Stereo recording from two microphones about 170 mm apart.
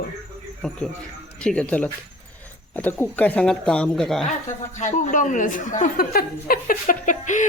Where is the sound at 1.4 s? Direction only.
5° left (ahead or behind).